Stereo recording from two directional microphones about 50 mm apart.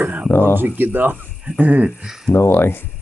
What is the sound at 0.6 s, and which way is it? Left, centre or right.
Speech, right.